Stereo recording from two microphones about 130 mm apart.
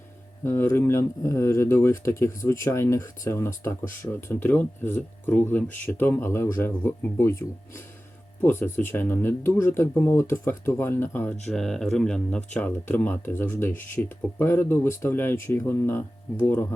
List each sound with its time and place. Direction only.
0.4 s speech: 20° left (ahead or behind)
11.4 s speech: 5° left (ahead or behind)